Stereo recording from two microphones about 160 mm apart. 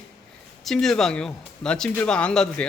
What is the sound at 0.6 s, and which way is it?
Speech, centre (ahead or behind).